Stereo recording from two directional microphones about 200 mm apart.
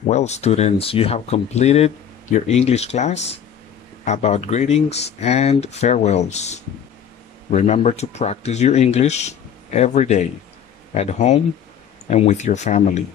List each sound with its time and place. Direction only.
0.0 s speech: 35° left (ahead or behind)